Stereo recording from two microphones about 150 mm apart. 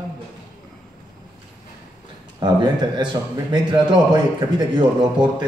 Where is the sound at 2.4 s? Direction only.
30° right (ahead or behind).